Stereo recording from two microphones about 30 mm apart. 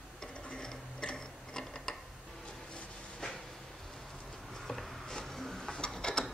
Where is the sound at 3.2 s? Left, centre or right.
Left.